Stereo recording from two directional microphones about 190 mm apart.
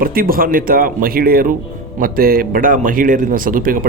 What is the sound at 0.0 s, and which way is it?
Speech, 50° right (ahead or behind).